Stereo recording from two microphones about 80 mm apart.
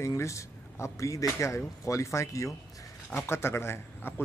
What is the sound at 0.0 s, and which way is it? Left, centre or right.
Speech, left.